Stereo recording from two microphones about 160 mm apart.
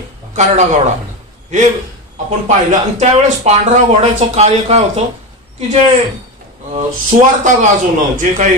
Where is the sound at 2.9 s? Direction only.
45° right (ahead or behind).